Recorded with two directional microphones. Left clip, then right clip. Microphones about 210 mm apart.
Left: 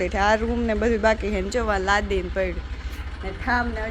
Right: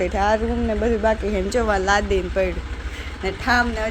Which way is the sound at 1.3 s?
5° right (ahead or behind).